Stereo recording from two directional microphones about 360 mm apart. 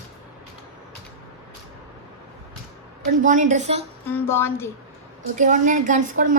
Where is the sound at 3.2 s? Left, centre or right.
Right.